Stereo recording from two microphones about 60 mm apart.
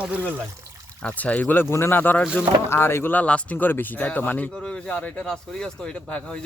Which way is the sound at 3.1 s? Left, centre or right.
Left.